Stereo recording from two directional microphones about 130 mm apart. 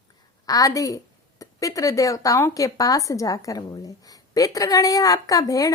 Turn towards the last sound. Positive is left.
turn(degrees=25)  # may be behind; listen again after turning